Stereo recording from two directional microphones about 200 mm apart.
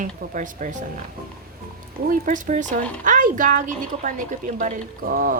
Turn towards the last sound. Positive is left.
turn(degrees=-40)  # may be behind; listen again after turning